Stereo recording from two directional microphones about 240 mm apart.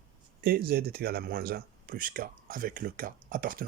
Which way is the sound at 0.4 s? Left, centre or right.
Right.